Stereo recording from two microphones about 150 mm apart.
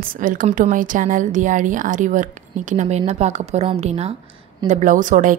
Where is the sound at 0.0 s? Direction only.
65° right (ahead or behind); by 4.1 s 45° right (ahead or behind).